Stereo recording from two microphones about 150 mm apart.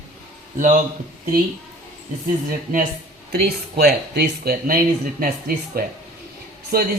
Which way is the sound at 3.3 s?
90° right.